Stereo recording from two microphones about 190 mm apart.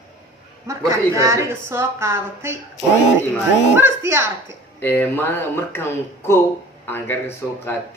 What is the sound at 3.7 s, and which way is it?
Speech, 10° right (ahead or behind).